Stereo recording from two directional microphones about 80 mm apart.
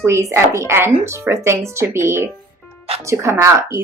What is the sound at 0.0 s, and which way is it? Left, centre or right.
Speech, right.